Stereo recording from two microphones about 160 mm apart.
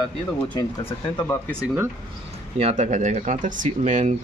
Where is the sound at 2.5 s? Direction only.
45° right (ahead or behind).